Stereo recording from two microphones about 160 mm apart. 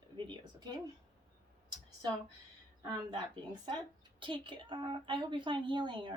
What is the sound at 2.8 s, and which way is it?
A woman's voice, 30° right (ahead or behind).